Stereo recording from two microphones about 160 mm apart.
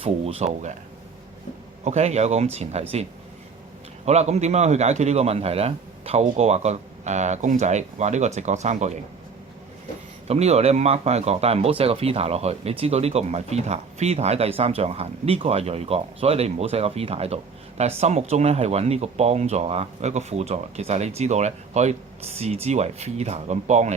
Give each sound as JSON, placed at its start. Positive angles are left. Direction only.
{"t": 0.0, "sound": "speech", "side_deg": -35}
{"t": 1.8, "sound": "a man's voice", "side_deg": -45}
{"t": 4.0, "sound": "a man's voice", "side_deg": -45}
{"t": 10.2, "sound": "speech", "side_deg": -40}